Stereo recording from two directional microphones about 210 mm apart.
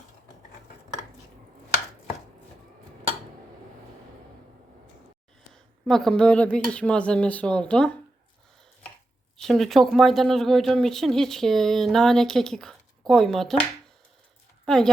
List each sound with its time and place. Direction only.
5.8 s speech: centre (ahead or behind)
9.4 s speech: centre (ahead or behind)
14.6 s a sound: 5° left (ahead or behind)